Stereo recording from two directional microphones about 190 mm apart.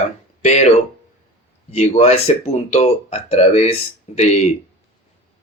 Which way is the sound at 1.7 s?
35° left (ahead or behind).